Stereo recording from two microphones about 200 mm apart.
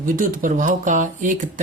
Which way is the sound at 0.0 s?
40° right (ahead or behind).